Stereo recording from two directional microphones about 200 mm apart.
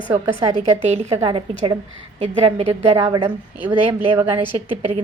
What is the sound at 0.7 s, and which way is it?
A woman's voice, 35° right (ahead or behind).